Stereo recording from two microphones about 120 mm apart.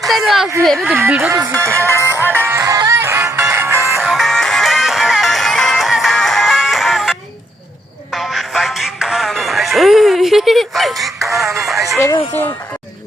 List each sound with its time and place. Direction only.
0.0 s a sound: centre (ahead or behind)
0.6 s speech: centre (ahead or behind)
0.9 s speech: 20° right (ahead or behind)
1.9 s music: 25° left (ahead or behind)
2.2 s music: 20° right (ahead or behind)
3.9 s music: centre (ahead or behind)
11.6 s speech: centre (ahead or behind)